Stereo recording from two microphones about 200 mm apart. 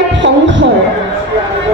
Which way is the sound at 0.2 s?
65° right (ahead or behind).